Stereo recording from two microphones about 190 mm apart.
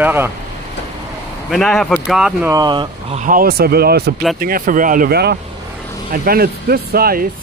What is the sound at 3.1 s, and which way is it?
Speech, 45° right (ahead or behind).